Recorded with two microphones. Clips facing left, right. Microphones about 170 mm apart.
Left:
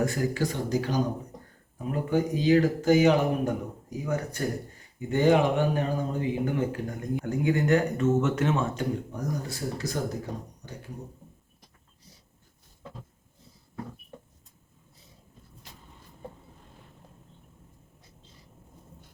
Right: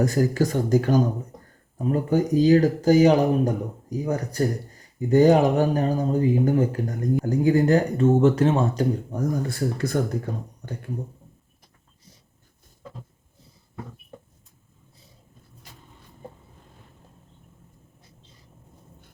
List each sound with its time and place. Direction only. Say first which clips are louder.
0.0 s speech: right 6 dB; 40° right (ahead or behind)
9.5 s speech: right 7 dB; 55° right (ahead or behind)